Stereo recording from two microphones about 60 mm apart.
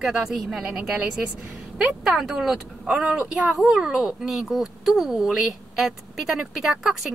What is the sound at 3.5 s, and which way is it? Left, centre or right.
Speech, centre.